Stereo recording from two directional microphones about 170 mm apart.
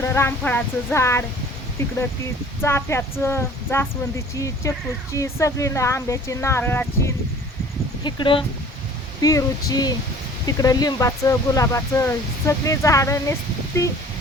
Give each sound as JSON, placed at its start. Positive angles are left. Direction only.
{"t": 0.0, "sound": "speech", "side_deg": 15}
{"t": 8.0, "sound": "speech", "side_deg": 30}